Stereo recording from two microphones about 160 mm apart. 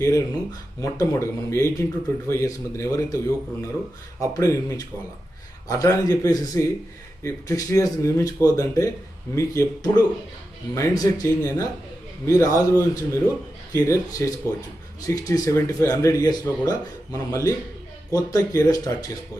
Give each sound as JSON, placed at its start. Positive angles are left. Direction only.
{"t": 0.0, "sound": "speech", "side_deg": 20}